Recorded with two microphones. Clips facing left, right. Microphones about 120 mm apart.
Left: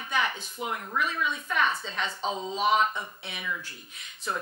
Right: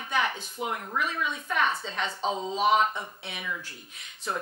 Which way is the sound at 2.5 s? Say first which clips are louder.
Right 1 dB; 55° right (ahead or behind).